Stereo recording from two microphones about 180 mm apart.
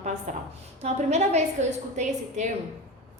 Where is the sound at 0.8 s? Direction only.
40° right (ahead or behind).